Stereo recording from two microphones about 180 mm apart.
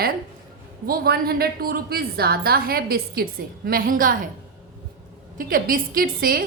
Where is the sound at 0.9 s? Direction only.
55° right (ahead or behind).